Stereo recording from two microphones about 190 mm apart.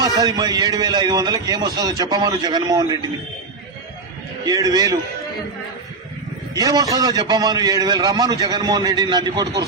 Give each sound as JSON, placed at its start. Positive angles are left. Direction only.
{"t": 0.0, "sound": "a man's voice", "side_deg": -20}
{"t": 4.4, "sound": "a man's voice", "side_deg": -20}
{"t": 6.5, "sound": "a man's voice", "side_deg": -20}